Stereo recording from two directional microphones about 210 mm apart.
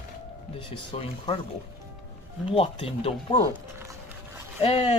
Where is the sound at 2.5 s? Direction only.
25° left (ahead or behind).